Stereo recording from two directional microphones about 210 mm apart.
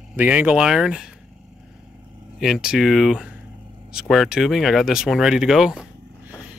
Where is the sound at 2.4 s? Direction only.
Centre (ahead or behind).